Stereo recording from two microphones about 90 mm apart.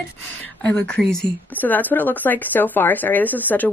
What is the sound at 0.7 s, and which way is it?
Speech, 10° left (ahead or behind).